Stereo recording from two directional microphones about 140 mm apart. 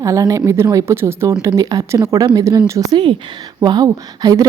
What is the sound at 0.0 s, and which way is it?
A woman's voice, 25° right (ahead or behind).